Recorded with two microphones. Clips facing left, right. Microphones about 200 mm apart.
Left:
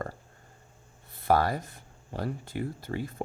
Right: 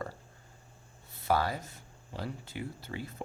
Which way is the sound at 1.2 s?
55° left (ahead or behind).